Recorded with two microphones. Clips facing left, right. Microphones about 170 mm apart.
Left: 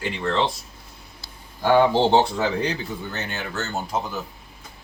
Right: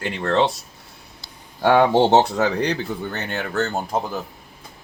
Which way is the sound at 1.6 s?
65° right (ahead or behind).